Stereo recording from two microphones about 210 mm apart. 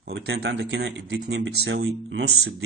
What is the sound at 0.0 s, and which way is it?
Speech, 50° right (ahead or behind).